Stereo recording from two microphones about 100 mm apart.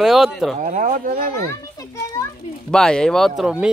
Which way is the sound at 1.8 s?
30° left (ahead or behind).